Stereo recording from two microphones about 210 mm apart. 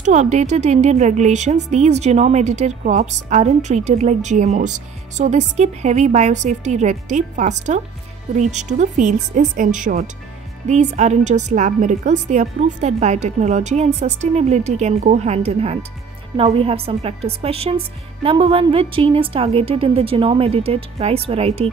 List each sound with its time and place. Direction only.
0.0 s a woman's voice: 35° right (ahead or behind)